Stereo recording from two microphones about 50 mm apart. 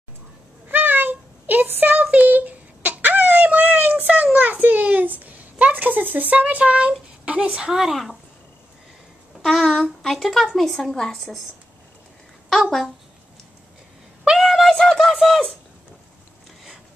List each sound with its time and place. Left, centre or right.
0.7 s a sound: right
7.2 s a woman's voice: right
7.7 s speech: centre
9.4 s a woman's voice: centre
12.4 s speech: centre
14.2 s a sound: centre